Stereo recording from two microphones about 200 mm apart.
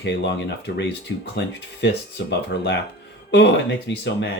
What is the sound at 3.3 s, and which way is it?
Speech, 60° left (ahead or behind).